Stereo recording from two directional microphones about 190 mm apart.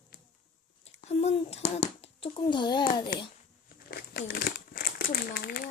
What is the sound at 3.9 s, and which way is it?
Crumpling, 50° left (ahead or behind).